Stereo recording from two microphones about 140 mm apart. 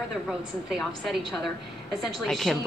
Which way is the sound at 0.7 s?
Centre (ahead or behind).